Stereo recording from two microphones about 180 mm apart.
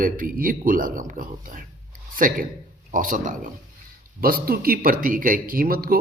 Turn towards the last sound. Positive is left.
turn(degrees=-55)  # may be behind; listen again after turning